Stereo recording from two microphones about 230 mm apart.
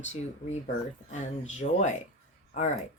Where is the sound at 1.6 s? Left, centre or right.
Left.